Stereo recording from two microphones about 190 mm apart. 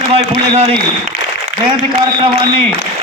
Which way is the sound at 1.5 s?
90° left.